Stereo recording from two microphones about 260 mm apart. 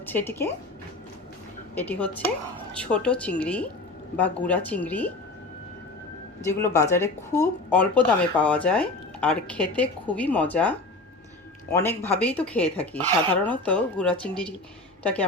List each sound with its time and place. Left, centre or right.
0.0 s speech: centre
1.7 s speech: centre
6.4 s speech: centre
11.8 s speech: centre